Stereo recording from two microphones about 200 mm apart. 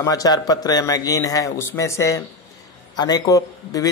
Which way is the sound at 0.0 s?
20° left (ahead or behind).